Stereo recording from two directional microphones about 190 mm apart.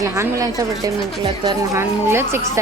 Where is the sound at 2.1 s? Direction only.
10° right (ahead or behind).